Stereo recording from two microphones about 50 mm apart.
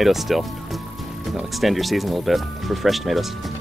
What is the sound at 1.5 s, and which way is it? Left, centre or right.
Speech, centre.